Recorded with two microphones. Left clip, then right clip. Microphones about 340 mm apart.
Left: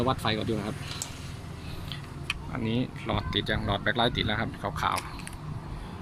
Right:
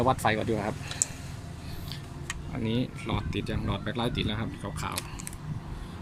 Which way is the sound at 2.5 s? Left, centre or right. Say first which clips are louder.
Right 3 dB; centre.